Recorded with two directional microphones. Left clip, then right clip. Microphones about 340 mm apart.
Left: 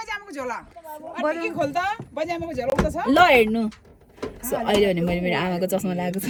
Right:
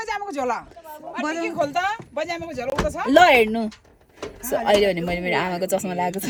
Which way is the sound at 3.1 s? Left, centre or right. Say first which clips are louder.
Right 2 dB; centre.